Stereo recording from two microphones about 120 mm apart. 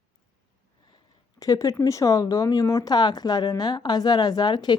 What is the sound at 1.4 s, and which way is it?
Speech, 30° left (ahead or behind).